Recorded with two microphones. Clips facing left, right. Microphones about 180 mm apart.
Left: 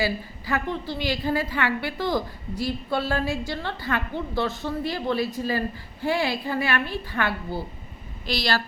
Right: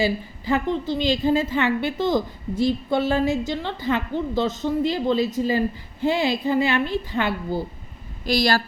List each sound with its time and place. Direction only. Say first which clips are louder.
0.0 s a woman's voice: right 4 dB; 20° right (ahead or behind)
8.3 s speech: right 5 dB; 45° right (ahead or behind)